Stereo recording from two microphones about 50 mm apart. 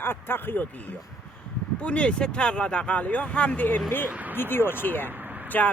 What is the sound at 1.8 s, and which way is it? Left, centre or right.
Speech, left.